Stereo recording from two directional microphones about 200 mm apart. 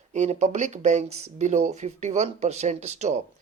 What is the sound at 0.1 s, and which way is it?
Speech, 35° right (ahead or behind).